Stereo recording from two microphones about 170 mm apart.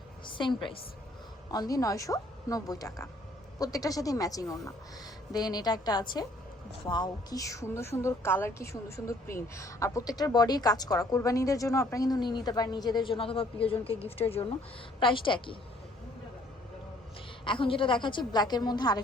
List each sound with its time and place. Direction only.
0.3 s a woman's voice: 30° left (ahead or behind)
17.4 s speech: 30° left (ahead or behind)